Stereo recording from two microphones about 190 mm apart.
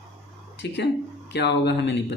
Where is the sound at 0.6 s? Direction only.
60° left (ahead or behind).